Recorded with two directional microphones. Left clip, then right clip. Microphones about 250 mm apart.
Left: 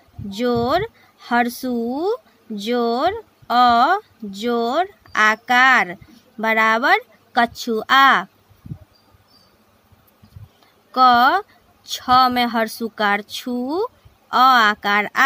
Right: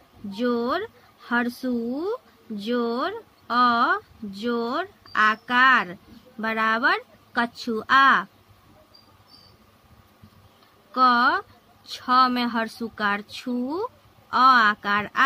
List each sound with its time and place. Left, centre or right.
0.3 s speech: left
10.9 s speech: left